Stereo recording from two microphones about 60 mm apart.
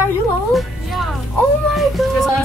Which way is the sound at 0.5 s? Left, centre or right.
Centre.